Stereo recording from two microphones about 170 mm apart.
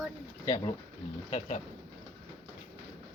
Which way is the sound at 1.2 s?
40° left (ahead or behind).